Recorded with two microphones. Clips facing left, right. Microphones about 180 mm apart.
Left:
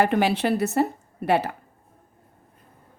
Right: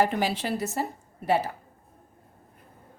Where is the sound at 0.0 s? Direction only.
65° left (ahead or behind).